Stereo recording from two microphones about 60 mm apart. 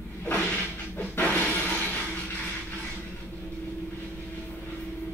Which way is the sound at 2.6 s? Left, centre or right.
Left.